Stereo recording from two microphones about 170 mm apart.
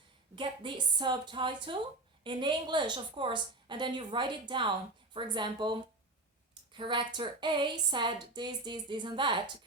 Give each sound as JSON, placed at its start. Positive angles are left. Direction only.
{"t": 0.3, "sound": "speech", "side_deg": -30}